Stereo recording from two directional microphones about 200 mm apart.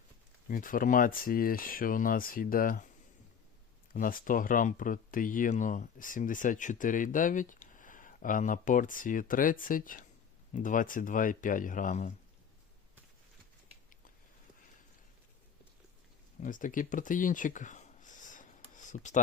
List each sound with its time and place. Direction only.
0.4 s speech: 45° left (ahead or behind)
3.9 s speech: 45° left (ahead or behind)
16.4 s a sound: 40° left (ahead or behind)